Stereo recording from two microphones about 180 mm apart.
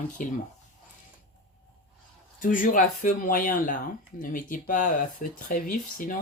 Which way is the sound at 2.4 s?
50° left (ahead or behind).